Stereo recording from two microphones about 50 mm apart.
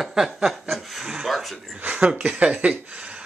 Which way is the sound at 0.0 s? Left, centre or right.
Centre.